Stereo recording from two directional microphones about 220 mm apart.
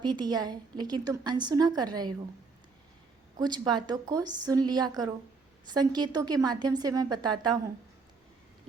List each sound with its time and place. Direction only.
0.0 s a woman's voice: 20° right (ahead or behind)
3.3 s a woman's voice: 20° right (ahead or behind)